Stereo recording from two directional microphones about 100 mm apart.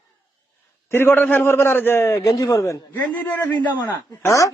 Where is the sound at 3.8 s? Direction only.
30° left (ahead or behind).